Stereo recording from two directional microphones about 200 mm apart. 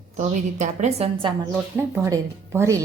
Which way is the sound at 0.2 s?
35° right (ahead or behind).